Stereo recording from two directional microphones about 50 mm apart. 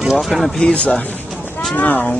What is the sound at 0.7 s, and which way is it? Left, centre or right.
Speech, left.